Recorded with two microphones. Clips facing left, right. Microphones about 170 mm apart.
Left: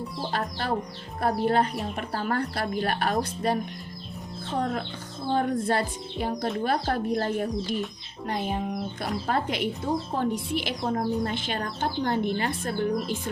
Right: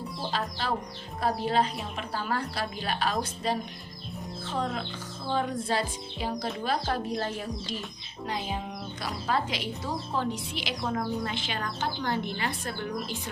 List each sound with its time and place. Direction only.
0.3 s speech: 55° left (ahead or behind)
10.8 s speech: 35° left (ahead or behind)